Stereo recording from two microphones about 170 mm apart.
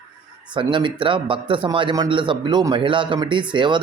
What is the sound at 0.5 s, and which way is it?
A man's voice, 30° right (ahead or behind).